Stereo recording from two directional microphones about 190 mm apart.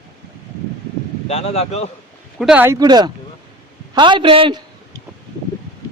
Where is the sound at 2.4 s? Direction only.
5° right (ahead or behind); by 4.6 s 25° right (ahead or behind).